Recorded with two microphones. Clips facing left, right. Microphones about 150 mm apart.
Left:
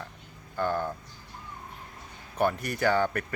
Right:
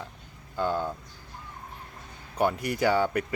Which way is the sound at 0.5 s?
15° right (ahead or behind).